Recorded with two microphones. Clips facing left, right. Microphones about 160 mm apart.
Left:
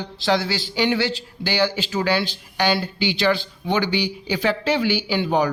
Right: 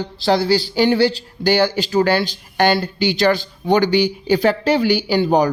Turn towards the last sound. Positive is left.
turn(degrees=-40)  # may be behind; listen again after turning